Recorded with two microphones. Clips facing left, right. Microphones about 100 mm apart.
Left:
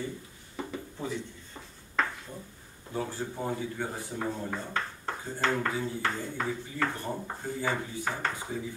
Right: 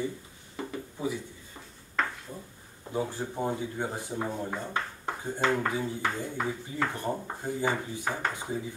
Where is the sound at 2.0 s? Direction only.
Centre (ahead or behind).